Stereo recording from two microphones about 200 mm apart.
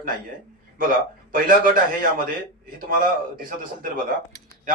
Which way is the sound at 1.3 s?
45° right (ahead or behind).